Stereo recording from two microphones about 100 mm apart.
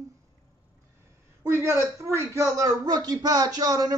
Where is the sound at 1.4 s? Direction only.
25° right (ahead or behind).